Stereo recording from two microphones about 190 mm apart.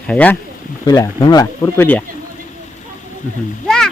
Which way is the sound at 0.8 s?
20° left (ahead or behind).